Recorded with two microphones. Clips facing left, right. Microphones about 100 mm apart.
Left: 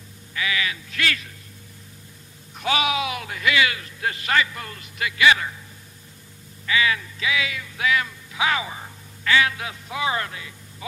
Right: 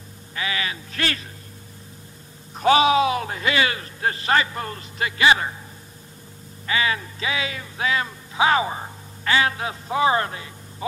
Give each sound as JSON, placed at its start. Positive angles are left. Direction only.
{"t": 0.3, "sound": "a man's voice", "side_deg": -35}
{"t": 2.5, "sound": "a man's voice", "side_deg": -35}
{"t": 6.6, "sound": "speech", "side_deg": -35}